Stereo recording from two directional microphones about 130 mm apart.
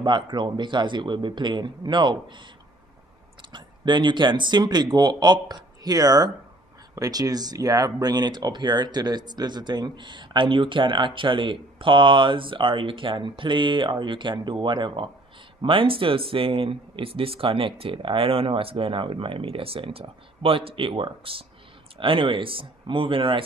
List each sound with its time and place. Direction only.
0.0 s speech: 35° right (ahead or behind)
3.5 s speech: 35° right (ahead or behind)